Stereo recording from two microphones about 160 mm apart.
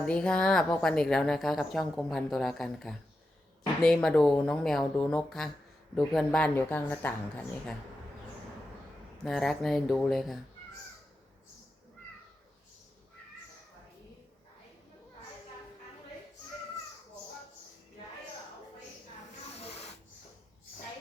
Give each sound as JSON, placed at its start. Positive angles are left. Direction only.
{"t": 0.0, "sound": "a woman's voice", "side_deg": 5}
{"t": 9.2, "sound": "a woman's voice", "side_deg": 5}
{"t": 19.5, "sound": "a sound", "side_deg": 40}